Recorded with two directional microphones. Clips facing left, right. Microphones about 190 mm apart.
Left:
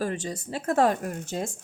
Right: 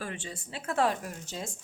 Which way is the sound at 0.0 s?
40° left (ahead or behind).